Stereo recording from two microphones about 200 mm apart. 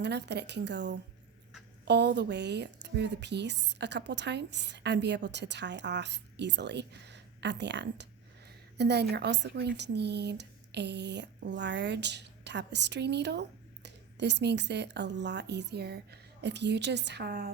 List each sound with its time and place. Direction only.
0.0 s a woman's voice: 60° right (ahead or behind)